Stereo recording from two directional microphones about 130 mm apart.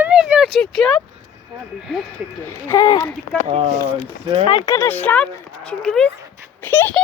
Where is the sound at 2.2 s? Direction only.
10° right (ahead or behind).